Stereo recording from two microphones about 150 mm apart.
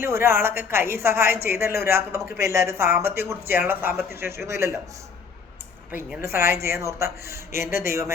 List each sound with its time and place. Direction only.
0.0 s a woman's voice: 15° right (ahead or behind)
6.0 s a woman's voice: 10° right (ahead or behind)